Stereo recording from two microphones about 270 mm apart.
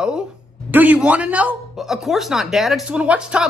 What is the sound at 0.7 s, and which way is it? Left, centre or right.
Speech, centre.